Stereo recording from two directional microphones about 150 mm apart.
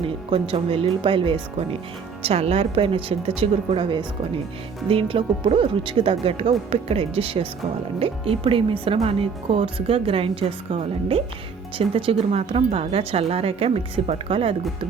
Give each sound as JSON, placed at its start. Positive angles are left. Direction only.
{"t": 0.0, "sound": "a woman's voice", "side_deg": -35}